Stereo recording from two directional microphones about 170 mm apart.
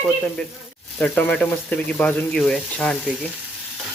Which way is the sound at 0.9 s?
10° left (ahead or behind).